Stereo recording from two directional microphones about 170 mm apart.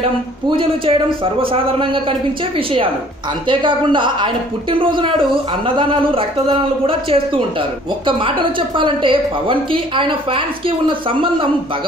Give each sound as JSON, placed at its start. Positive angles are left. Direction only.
{"t": 0.5, "sound": "a woman's voice", "side_deg": -35}